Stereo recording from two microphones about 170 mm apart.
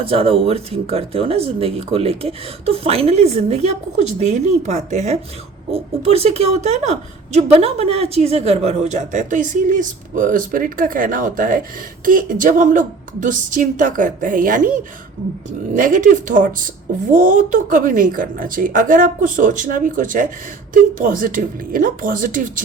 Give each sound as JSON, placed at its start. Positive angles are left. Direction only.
{"t": 0.0, "sound": "a woman's voice", "side_deg": -35}